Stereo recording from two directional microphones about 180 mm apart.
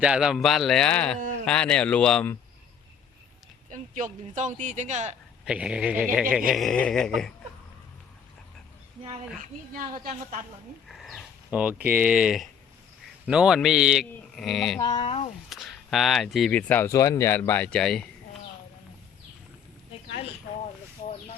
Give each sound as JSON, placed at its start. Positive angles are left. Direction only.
{"t": 0.0, "sound": "speech", "side_deg": -5}
{"t": 3.7, "sound": "speech", "side_deg": -45}
{"t": 5.5, "sound": "speech", "side_deg": -5}
{"t": 9.4, "sound": "speech", "side_deg": -50}
{"t": 10.8, "sound": "dog", "side_deg": 0}
{"t": 11.9, "sound": "speech", "side_deg": -5}
{"t": 14.8, "sound": "speech", "side_deg": 25}
{"t": 15.4, "sound": "speech", "side_deg": 0}